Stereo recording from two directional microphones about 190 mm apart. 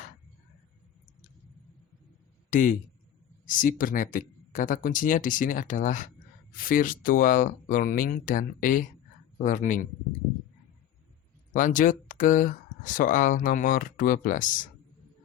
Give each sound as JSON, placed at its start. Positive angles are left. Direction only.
{"t": 2.5, "sound": "a man's voice", "side_deg": 45}
{"t": 11.5, "sound": "speech", "side_deg": 45}